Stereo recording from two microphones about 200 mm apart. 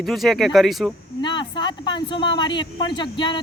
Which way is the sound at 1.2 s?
20° left (ahead or behind).